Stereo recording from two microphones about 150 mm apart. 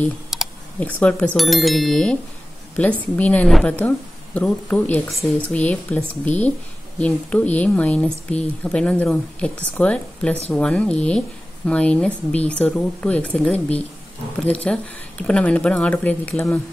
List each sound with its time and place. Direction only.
0.3 s computer keyboard: centre (ahead or behind)
0.7 s a woman's voice: 10° left (ahead or behind)
6.3 s speech: 50° left (ahead or behind)
7.0 s a woman's voice: 10° left (ahead or behind)